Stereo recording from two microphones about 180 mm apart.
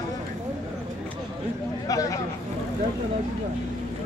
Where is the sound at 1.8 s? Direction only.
20° left (ahead or behind).